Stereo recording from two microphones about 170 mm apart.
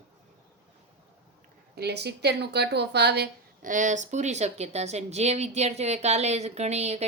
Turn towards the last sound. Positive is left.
turn(degrees=-40)  # may be behind; listen again after turning